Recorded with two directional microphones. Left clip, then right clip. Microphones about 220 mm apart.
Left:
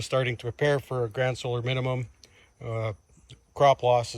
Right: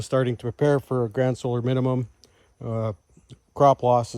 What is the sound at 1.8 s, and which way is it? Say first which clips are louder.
Speech: right 5 dB; 55° right (ahead or behind).